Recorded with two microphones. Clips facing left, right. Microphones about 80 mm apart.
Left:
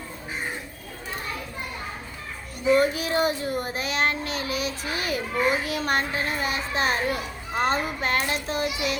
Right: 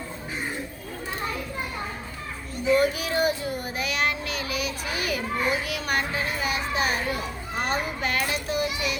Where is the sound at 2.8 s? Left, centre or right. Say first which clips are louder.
Left 1 dB; left.